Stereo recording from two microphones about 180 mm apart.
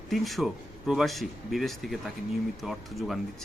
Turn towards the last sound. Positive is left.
turn(degrees=0)  # may be behind; listen again after turning